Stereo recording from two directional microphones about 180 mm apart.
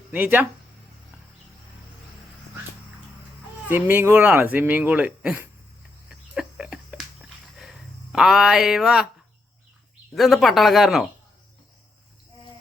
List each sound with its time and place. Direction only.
0.1 s speech: 10° right (ahead or behind)
3.7 s speech: 10° right (ahead or behind)
6.1 s a sound: 5° right (ahead or behind)
10.2 s speech: centre (ahead or behind)